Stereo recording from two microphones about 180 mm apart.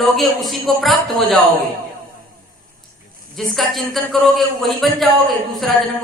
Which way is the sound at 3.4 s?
Centre (ahead or behind).